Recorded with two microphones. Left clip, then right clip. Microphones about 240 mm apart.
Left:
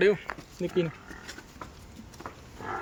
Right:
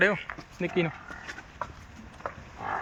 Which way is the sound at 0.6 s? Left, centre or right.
Right.